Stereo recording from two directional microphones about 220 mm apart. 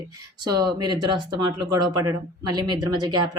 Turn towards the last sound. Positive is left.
turn(degrees=-20)  # may be behind; listen again after turning